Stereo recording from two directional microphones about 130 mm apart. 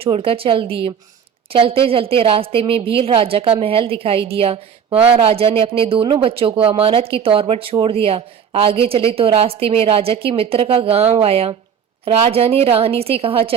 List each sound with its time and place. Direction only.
0.0 s speech: 45° right (ahead or behind)